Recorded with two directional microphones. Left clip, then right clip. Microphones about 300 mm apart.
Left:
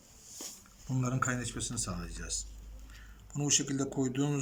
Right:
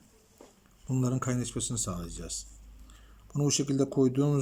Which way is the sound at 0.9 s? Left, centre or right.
Centre.